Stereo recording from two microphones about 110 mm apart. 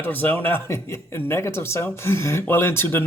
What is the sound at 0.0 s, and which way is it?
Speech, 15° left (ahead or behind).